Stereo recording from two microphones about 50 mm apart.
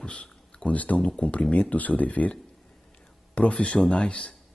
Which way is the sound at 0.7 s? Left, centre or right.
Left.